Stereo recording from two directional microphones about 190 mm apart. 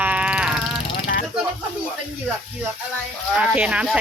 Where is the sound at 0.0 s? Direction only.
5° right (ahead or behind).